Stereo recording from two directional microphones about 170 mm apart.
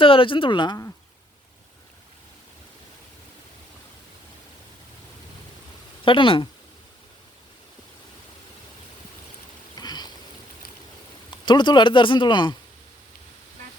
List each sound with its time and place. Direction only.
0.0 s speech: 30° left (ahead or behind)
6.1 s speech: 30° left (ahead or behind)
9.7 s a sound: 25° left (ahead or behind)
11.3 s speech: 25° left (ahead or behind)